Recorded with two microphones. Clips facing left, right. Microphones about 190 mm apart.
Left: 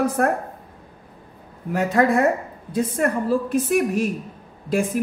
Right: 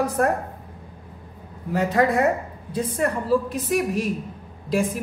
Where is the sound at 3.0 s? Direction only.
50° left (ahead or behind).